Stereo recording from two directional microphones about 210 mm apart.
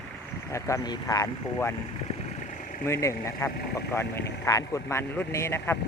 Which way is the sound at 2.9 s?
15° left (ahead or behind).